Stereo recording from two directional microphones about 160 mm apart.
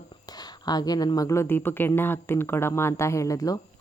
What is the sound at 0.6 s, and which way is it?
Speech, 25° left (ahead or behind).